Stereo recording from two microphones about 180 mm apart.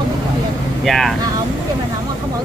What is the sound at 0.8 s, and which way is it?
Speech, centre (ahead or behind).